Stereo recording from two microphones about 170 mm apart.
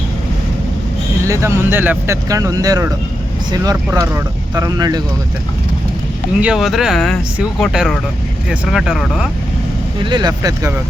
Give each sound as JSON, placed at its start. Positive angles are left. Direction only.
{"t": 1.3, "sound": "speech", "side_deg": -15}
{"t": 6.4, "sound": "speech", "side_deg": -5}
{"t": 10.0, "sound": "speech", "side_deg": -25}